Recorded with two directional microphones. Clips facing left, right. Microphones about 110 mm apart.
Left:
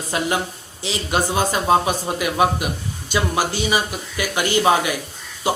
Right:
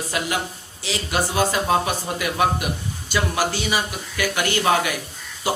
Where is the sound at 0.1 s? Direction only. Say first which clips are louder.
Left 4 dB; 30° left (ahead or behind).